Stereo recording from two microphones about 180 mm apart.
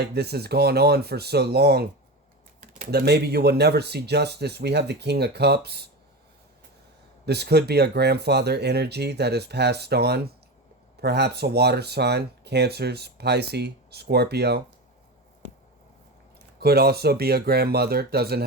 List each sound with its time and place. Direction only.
0.0 s speech: 65° right (ahead or behind)
2.9 s speech: 65° right (ahead or behind)
7.3 s speech: 65° right (ahead or behind)
16.6 s speech: 60° right (ahead or behind)